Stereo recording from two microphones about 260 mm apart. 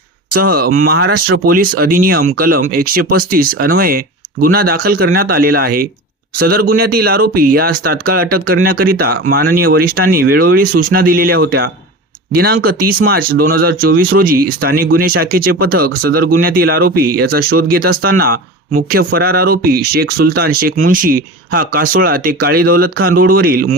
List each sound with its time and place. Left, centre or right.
0.3 s speech: right